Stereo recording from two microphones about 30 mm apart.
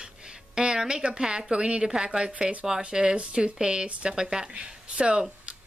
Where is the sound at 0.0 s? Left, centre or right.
Right.